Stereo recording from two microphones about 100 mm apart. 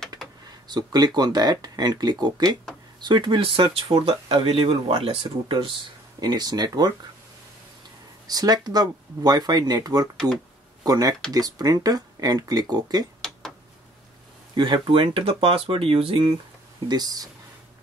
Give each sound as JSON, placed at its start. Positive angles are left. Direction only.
{"t": 0.7, "sound": "speech", "side_deg": -40}
{"t": 6.1, "sound": "speech", "side_deg": -40}
{"t": 8.3, "sound": "speech", "side_deg": -40}
{"t": 14.5, "sound": "speech", "side_deg": -50}
{"t": 16.8, "sound": "speech", "side_deg": -40}